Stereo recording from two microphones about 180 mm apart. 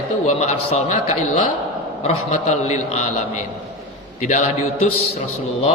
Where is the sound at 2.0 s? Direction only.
40° left (ahead or behind).